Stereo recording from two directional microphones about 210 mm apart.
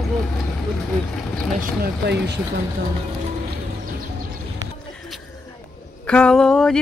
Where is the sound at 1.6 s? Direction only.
55° right (ahead or behind).